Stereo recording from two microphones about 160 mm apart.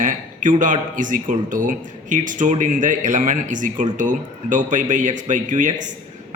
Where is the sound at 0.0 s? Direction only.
55° right (ahead or behind).